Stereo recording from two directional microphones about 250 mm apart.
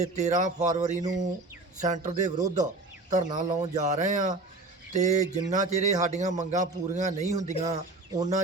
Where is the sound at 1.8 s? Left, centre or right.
Right.